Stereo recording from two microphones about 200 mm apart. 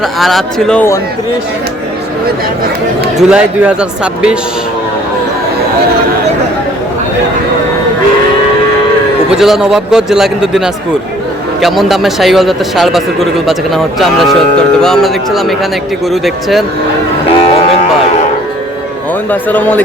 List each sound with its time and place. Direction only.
0.0 s speech: centre (ahead or behind)
3.2 s speech: 5° right (ahead or behind)
9.3 s speech: centre (ahead or behind)
17.2 s vehicle: 30° left (ahead or behind)
19.3 s a man's voice: 10° left (ahead or behind)